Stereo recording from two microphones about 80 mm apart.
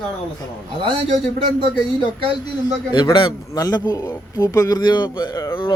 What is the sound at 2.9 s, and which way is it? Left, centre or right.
Speech, left.